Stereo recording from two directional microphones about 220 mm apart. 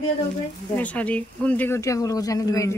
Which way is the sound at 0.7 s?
5° left (ahead or behind).